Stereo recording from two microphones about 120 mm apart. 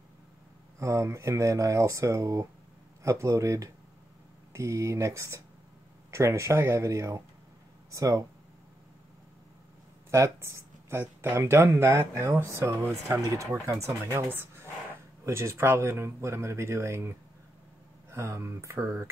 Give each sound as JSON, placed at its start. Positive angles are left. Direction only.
{"t": 0.7, "sound": "speech", "side_deg": -25}
{"t": 10.1, "sound": "speech", "side_deg": -25}
{"t": 18.1, "sound": "speech", "side_deg": -20}